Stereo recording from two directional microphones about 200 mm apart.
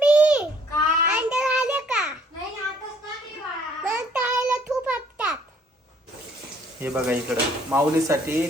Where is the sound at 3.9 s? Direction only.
5° right (ahead or behind).